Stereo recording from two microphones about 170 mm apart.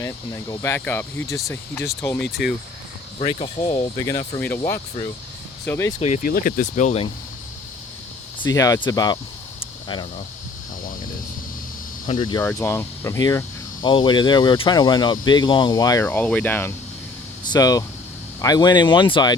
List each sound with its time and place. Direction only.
0.5 s speech: 15° left (ahead or behind)
3.2 s speech: 35° left (ahead or behind)
3.9 s speech: 20° left (ahead or behind)
4.4 s speech: 10° left (ahead or behind)
6.2 s speech: 55° left (ahead or behind)
8.4 s speech: 20° left (ahead or behind)
9.6 s cricket: 30° left (ahead or behind)
12.0 s speech: 30° left (ahead or behind)
12.4 s speech: 15° left (ahead or behind)
16.0 s speech: 10° left (ahead or behind)
17.4 s speech: 25° left (ahead or behind)